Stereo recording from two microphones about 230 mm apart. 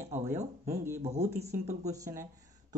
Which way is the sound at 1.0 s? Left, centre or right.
Right.